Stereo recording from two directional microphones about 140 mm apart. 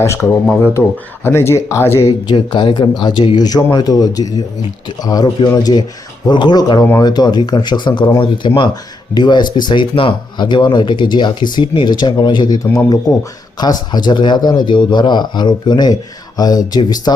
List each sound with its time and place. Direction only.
0.0 s speech: 20° left (ahead or behind)
2.2 s speech: 35° left (ahead or behind)